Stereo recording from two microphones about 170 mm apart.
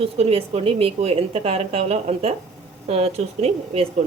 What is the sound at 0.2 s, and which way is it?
Speech, 35° right (ahead or behind).